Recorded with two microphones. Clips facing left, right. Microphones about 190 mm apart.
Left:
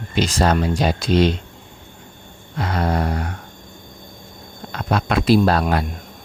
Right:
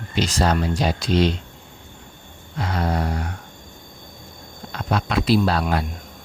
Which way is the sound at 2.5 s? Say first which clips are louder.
Left 3 dB; 60° left (ahead or behind).